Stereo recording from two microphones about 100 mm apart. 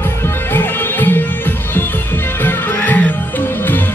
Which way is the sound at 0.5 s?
20° left (ahead or behind).